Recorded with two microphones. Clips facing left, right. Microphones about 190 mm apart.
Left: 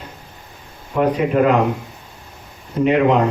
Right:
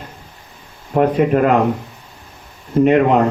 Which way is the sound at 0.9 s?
50° right (ahead or behind).